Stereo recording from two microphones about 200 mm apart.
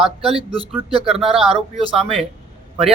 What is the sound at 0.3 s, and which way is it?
Speech, 30° right (ahead or behind).